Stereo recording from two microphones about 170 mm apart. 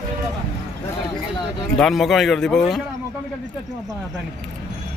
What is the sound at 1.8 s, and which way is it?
Speech, centre (ahead or behind).